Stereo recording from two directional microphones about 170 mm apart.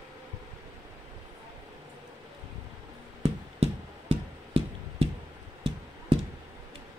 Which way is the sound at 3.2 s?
35° right (ahead or behind).